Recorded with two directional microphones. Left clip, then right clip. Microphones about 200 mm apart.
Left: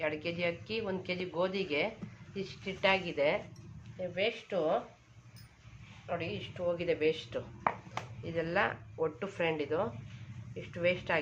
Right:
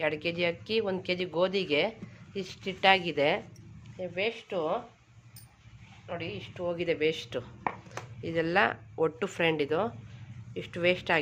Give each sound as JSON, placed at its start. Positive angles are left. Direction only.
{"t": 0.0, "sound": "speech", "side_deg": -50}
{"t": 4.1, "sound": "speech", "side_deg": -35}
{"t": 6.1, "sound": "speech", "side_deg": -25}